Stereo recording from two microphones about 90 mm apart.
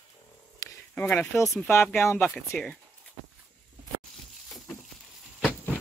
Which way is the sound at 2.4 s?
10° left (ahead or behind).